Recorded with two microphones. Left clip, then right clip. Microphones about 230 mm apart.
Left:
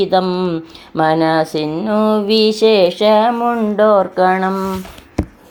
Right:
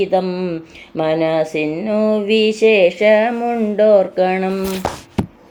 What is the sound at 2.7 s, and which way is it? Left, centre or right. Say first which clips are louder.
Speech: right 1 dB; left.